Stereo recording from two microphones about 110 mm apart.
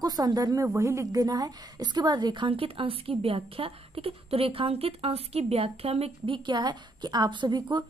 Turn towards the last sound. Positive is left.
turn(degrees=-40)  # may be behind; listen again after turning